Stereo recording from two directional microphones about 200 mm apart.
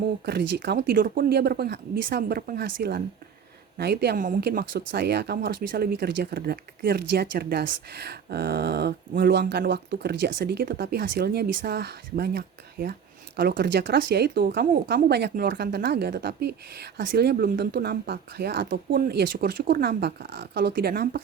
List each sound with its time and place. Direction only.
0.3 s speech: 55° right (ahead or behind)